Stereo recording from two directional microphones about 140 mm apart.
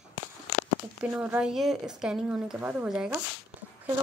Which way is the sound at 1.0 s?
5° right (ahead or behind).